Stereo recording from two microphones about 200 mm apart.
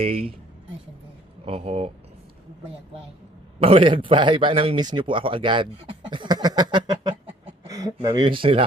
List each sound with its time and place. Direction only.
0.0 s speech: 30° right (ahead or behind)
1.5 s speech: 30° right (ahead or behind)
3.6 s a man's voice: 25° right (ahead or behind)